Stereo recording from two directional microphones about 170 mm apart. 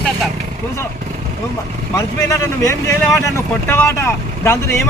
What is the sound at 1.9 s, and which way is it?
Speech, 15° left (ahead or behind).